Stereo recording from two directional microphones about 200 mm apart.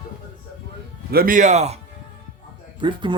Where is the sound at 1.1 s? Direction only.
45° right (ahead or behind).